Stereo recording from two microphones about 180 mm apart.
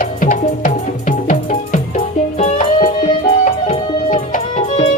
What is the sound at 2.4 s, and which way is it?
Music, 35° left (ahead or behind).